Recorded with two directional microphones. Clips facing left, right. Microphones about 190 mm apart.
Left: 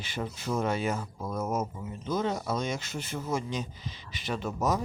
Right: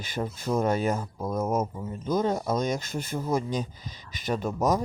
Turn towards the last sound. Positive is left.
turn(degrees=-45)  # may be behind; listen again after turning